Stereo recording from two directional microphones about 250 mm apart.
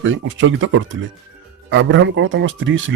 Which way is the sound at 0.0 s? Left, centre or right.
Right.